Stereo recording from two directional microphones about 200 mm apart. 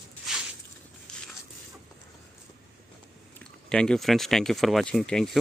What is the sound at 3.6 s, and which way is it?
Speech, 5° left (ahead or behind).